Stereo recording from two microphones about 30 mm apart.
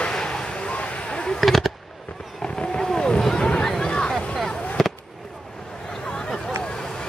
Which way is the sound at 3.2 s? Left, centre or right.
Left.